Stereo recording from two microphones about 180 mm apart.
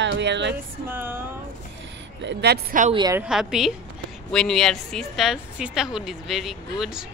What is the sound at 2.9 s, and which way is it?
Speech, 20° right (ahead or behind).